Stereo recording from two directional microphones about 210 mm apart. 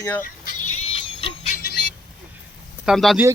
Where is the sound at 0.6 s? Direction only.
90° left.